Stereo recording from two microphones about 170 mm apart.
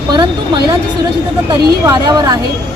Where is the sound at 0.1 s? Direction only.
25° right (ahead or behind).